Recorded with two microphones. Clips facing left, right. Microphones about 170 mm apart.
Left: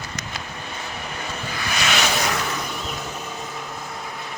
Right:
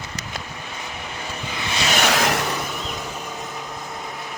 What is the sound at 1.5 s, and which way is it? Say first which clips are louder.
Vehicle: right 1 dB; 25° right (ahead or behind).